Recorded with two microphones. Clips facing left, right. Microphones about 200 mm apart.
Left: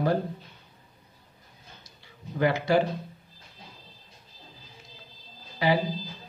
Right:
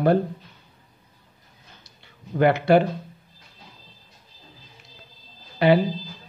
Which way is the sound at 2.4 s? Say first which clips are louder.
Right 6 dB; 60° right (ahead or behind).